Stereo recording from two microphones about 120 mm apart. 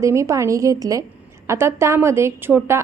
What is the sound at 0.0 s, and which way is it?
A woman's voice, 25° right (ahead or behind).